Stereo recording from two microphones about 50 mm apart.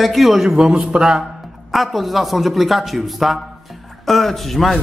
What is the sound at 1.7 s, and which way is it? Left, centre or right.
A man's voice, centre.